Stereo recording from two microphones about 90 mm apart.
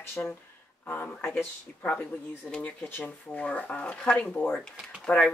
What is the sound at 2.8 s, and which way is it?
Speech, 20° left (ahead or behind).